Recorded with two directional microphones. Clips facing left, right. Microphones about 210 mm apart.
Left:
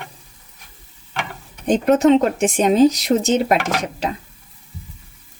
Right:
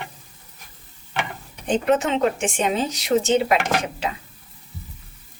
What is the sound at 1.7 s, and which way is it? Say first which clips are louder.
Speech: left 7 dB; 40° left (ahead or behind).